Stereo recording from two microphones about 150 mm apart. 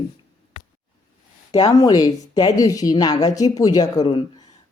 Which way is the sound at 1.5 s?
25° left (ahead or behind).